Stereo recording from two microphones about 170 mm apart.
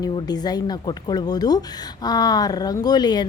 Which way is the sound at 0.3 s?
25° left (ahead or behind).